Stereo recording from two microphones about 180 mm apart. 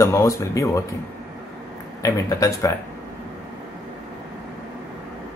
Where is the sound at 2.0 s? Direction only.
20° left (ahead or behind).